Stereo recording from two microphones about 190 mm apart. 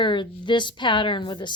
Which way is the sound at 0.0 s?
25° left (ahead or behind).